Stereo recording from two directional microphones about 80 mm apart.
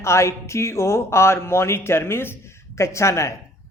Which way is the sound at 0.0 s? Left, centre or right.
Left.